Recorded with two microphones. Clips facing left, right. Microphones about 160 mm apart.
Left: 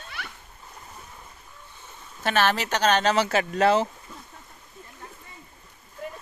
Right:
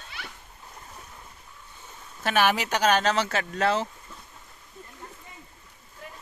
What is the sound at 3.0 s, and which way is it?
Speech, 10° left (ahead or behind).